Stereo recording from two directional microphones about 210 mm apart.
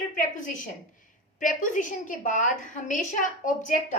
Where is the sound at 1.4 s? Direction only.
40° left (ahead or behind).